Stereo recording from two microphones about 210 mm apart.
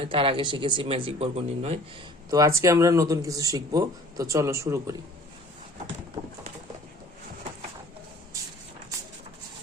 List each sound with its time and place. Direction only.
0.0 s speech: 25° right (ahead or behind)
2.3 s speech: 15° right (ahead or behind)